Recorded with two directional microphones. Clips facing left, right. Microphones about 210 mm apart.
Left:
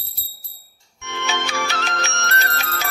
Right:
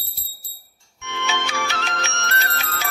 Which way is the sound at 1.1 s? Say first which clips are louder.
Left 1 dB; 40° left (ahead or behind).